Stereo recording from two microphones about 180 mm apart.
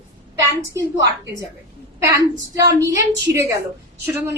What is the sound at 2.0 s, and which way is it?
A woman's voice, 15° right (ahead or behind).